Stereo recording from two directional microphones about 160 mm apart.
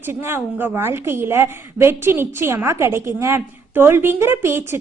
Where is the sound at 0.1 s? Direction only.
15° right (ahead or behind).